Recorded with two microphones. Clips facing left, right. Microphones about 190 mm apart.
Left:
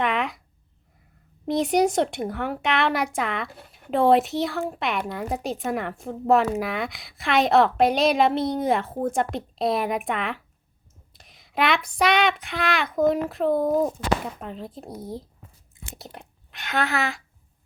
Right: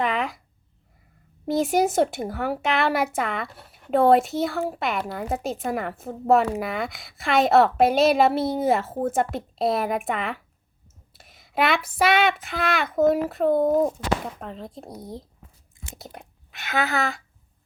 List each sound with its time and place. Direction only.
0.0 s a sound: centre (ahead or behind)
1.5 s speech: centre (ahead or behind)
13.6 s speech: 25° right (ahead or behind)
14.3 s speech: centre (ahead or behind)